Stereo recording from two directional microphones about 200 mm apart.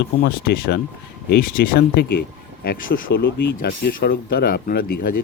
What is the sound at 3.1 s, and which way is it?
Speech, 55° left (ahead or behind).